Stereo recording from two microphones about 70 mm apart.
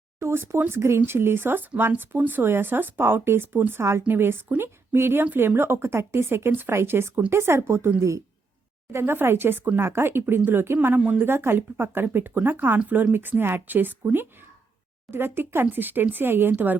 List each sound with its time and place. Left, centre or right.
0.2 s speech: right
1.7 s speech: centre; by 7.9 s right
8.9 s speech: right
11.3 s speech: right
12.8 s speech: right